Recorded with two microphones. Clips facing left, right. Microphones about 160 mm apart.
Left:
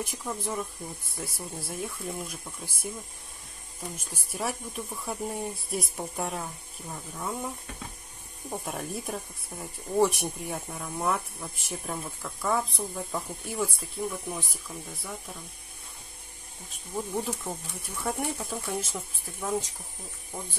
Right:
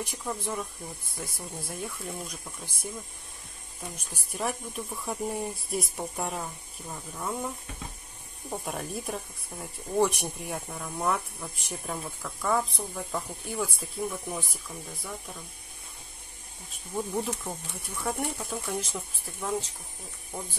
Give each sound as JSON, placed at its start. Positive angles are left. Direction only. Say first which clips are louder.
{"t": 0.0, "sound": "speech", "louder": "even", "side_deg": 0}
{"t": 3.9, "sound": "speech", "louder": "left 1 dB", "side_deg": 5}
{"t": 8.5, "sound": "speech", "louder": "even", "side_deg": 0}
{"t": 16.9, "sound": "speech", "louder": "right 1 dB", "side_deg": 0}